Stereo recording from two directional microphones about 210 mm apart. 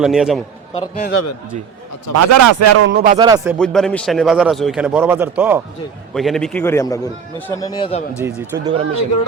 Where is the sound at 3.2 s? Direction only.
15° right (ahead or behind).